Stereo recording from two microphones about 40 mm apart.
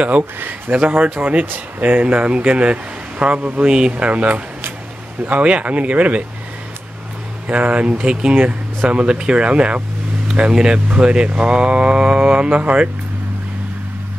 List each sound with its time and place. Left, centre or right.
0.4 s speech: right
0.7 s speech: right
3.6 s speech: right
4.0 s speech: right
7.4 s speech: right
7.9 s speech: right
10.5 s speech: centre
11.2 s speech: right
11.5 s speech: right